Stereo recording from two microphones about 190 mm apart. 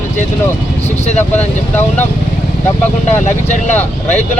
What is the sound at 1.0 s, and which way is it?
Speech, 35° left (ahead or behind).